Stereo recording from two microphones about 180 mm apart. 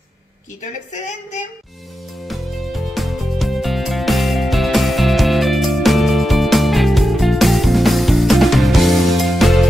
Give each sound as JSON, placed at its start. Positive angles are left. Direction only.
{"t": 0.9, "sound": "speech", "side_deg": 40}
{"t": 2.2, "sound": "music", "side_deg": 0}